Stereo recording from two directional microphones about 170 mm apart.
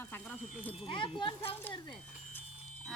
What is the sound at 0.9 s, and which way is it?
Speech, 30° left (ahead or behind).